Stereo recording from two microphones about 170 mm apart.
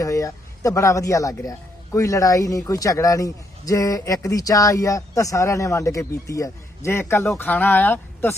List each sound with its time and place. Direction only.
0.0 s speech: 20° left (ahead or behind)